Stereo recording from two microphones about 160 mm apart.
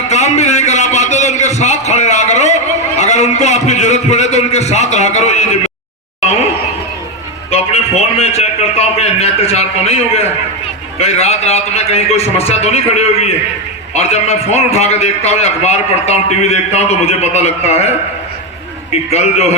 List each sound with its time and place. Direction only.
0.1 s a sound: 45° left (ahead or behind)
7.5 s a man's voice: 40° left (ahead or behind)
19.1 s a man's voice: 40° left (ahead or behind)